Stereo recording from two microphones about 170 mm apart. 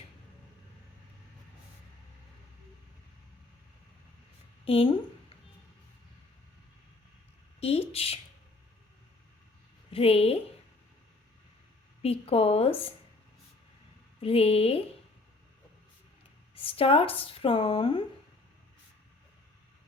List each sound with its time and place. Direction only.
4.6 s speech: 35° left (ahead or behind)
7.6 s speech: 35° left (ahead or behind)
9.9 s a woman's voice: 35° left (ahead or behind)
12.0 s speech: 35° left (ahead or behind)
14.2 s speech: 35° left (ahead or behind)
16.6 s speech: 35° left (ahead or behind)